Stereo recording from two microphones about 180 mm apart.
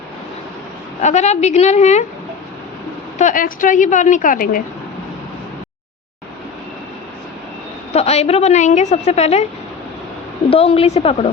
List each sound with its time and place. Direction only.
1.0 s a woman's voice: 40° left (ahead or behind)
3.2 s a woman's voice: 45° left (ahead or behind)
7.9 s a woman's voice: 35° left (ahead or behind)
10.5 s a woman's voice: 30° left (ahead or behind)